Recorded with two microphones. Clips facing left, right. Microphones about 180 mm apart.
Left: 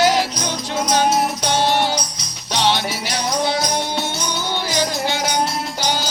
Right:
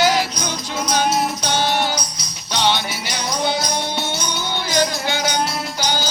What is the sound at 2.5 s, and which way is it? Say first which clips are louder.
Music: left 1 dB; centre (ahead or behind).